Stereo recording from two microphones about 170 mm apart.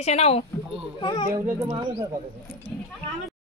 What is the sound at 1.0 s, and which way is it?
Speech, 25° left (ahead or behind).